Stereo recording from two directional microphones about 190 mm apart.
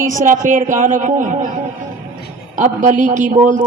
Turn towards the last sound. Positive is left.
turn(degrees=-40)  # may be behind; listen again after turning